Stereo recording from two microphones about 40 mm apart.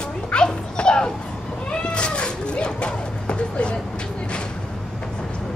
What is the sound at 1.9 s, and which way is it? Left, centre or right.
Cat, left.